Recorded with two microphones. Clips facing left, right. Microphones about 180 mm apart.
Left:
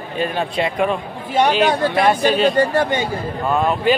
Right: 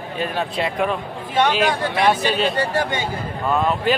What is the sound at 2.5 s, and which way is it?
Speech, 45° left (ahead or behind).